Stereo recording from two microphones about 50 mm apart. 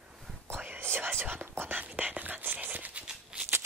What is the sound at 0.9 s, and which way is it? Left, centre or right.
Whispering, right.